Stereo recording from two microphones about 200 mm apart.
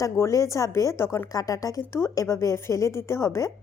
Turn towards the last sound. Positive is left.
turn(degrees=15)  # may be behind; listen again after turning